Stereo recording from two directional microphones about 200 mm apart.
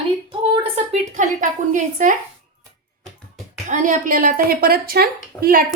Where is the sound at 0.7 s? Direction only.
35° right (ahead or behind).